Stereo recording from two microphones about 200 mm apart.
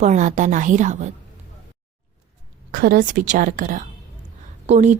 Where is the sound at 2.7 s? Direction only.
45° right (ahead or behind).